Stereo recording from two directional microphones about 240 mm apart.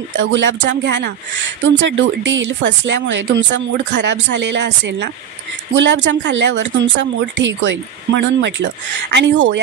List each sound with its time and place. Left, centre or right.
0.2 s speech: right